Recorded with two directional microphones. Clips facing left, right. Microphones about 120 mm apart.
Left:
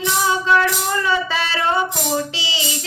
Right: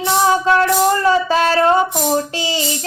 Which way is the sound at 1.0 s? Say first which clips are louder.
Right 7 dB; 40° right (ahead or behind).